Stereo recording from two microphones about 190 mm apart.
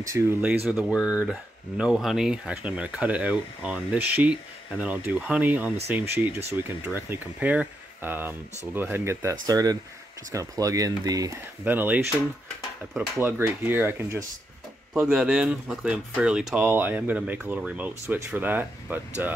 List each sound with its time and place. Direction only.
0.0 s speech: 10° right (ahead or behind)